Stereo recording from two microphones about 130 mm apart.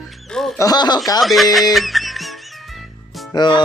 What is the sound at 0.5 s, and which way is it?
Speech, 30° left (ahead or behind).